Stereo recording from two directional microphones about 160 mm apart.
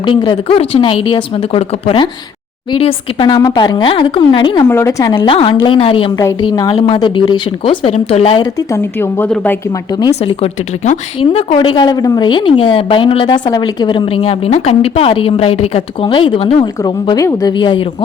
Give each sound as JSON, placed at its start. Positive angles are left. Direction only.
{"t": 0.0, "sound": "a woman's voice", "side_deg": 30}
{"t": 4.7, "sound": "a woman's voice", "side_deg": 15}
{"t": 5.1, "sound": "speech", "side_deg": 35}
{"t": 8.4, "sound": "a woman's voice", "side_deg": 20}
{"t": 10.2, "sound": "a woman's voice", "side_deg": 40}